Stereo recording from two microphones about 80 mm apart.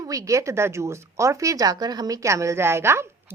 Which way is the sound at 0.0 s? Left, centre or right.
Right.